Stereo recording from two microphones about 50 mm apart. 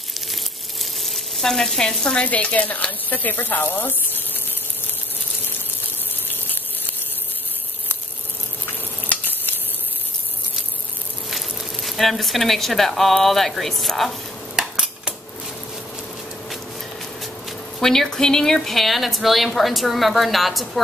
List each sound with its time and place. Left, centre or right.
0.1 s frying: centre
2.1 s speech: left
8.6 s a sound: left
11.2 s speech: centre
14.5 s cutlery: centre
17.7 s a woman's voice: centre